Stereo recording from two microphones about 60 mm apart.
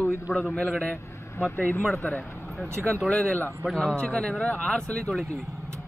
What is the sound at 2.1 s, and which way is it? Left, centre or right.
Speech, centre.